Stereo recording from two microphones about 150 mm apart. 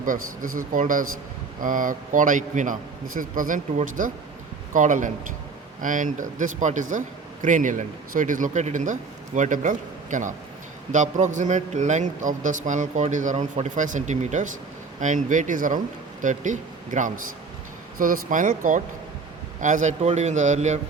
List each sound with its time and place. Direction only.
0.0 s a man's voice: 65° right (ahead or behind)